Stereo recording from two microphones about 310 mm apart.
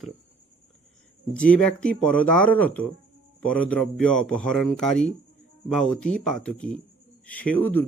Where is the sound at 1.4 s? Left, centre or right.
Centre.